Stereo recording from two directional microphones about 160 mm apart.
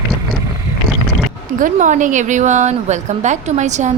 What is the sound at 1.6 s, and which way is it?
A woman's voice, 50° right (ahead or behind).